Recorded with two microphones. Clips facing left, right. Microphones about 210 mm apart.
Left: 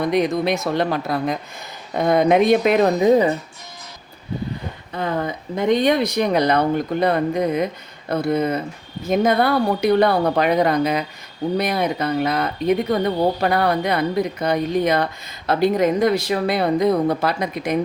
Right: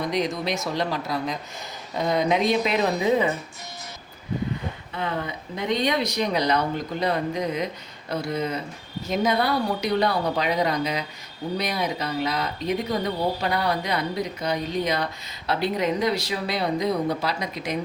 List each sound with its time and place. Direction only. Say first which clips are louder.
0.0 s a woman's voice: left 7 dB; 55° left (ahead or behind); by 3.3 s 40° left (ahead or behind)
4.9 s a woman's voice: left 6 dB; 45° left (ahead or behind)